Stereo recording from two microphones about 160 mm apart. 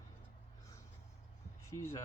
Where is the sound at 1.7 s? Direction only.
20° left (ahead or behind).